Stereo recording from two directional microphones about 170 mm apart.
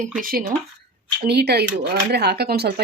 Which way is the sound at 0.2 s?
60° right (ahead or behind).